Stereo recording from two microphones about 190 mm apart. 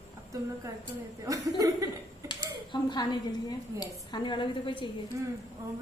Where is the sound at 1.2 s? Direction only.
20° right (ahead or behind).